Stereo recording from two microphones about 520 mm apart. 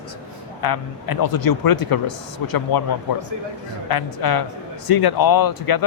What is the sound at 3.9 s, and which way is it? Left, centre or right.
A man's voice, left.